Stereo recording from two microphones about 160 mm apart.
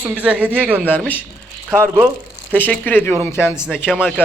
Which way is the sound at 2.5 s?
10° left (ahead or behind).